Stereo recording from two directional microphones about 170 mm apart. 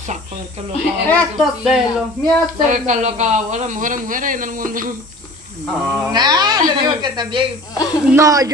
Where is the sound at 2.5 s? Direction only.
45° right (ahead or behind).